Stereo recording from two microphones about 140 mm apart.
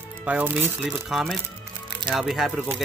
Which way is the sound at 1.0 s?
Centre (ahead or behind).